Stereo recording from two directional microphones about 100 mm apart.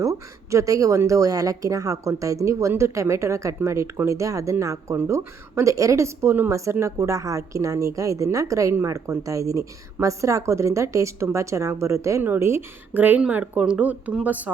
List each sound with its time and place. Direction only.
0.0 s a woman's voice: 30° right (ahead or behind); by 14.5 s 15° right (ahead or behind)